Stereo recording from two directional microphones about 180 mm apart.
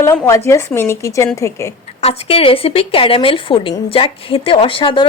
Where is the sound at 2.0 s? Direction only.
35° left (ahead or behind).